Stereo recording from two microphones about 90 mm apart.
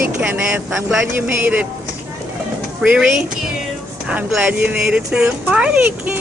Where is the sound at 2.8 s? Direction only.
10° right (ahead or behind).